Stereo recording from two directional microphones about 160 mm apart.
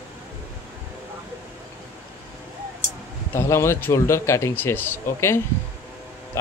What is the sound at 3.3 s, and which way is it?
Speech, 15° left (ahead or behind).